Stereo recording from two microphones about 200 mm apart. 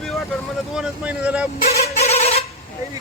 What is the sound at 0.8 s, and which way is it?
Speech, 5° right (ahead or behind).